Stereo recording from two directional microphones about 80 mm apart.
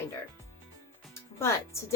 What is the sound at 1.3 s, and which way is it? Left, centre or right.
Speech, left.